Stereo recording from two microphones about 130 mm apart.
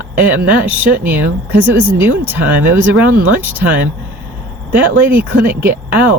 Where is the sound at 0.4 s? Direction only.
10° right (ahead or behind).